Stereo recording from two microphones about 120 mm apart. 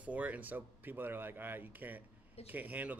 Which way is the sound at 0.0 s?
10° right (ahead or behind).